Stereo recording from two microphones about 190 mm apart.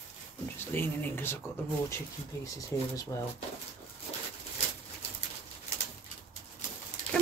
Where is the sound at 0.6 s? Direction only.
10° left (ahead or behind).